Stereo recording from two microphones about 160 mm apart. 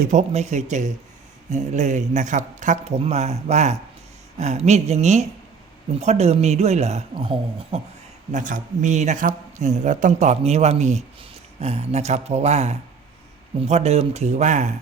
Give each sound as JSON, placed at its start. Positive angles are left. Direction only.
{"t": 0.0, "sound": "speech", "side_deg": -50}
{"t": 8.3, "sound": "speech", "side_deg": -55}